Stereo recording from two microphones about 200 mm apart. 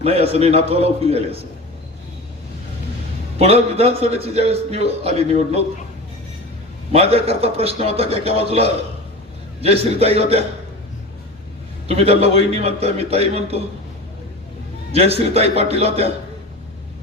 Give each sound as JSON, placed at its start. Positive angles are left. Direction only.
{"t": 0.0, "sound": "a man's voice", "side_deg": -30}
{"t": 3.3, "sound": "a man's voice", "side_deg": -30}
{"t": 6.9, "sound": "a man's voice", "side_deg": -30}
{"t": 11.9, "sound": "a man's voice", "side_deg": -30}
{"t": 14.9, "sound": "a man's voice", "side_deg": -30}